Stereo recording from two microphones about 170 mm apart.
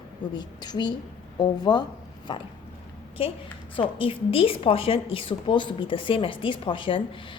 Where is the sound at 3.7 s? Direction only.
30° left (ahead or behind).